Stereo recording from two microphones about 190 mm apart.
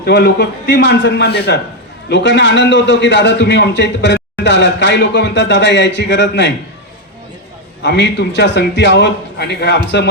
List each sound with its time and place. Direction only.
0.0 s a man's voice: 60° left (ahead or behind)
7.8 s a man's voice: 70° left (ahead or behind)